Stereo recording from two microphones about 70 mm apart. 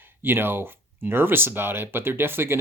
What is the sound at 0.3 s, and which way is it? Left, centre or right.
Speech, right.